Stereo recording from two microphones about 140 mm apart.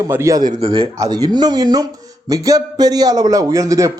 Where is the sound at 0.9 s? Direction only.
25° right (ahead or behind).